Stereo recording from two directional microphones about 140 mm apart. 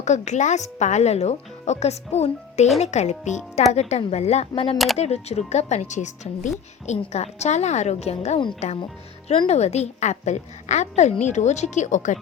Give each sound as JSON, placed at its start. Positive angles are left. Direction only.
{"t": 0.0, "sound": "a woman's voice", "side_deg": 55}